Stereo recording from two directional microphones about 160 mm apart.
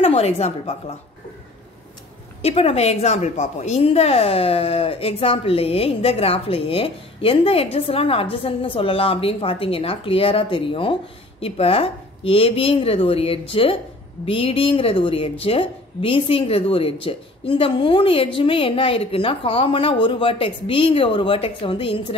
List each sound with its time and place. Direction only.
0.0 s a woman's voice: 40° left (ahead or behind)
2.4 s a woman's voice: 40° left (ahead or behind)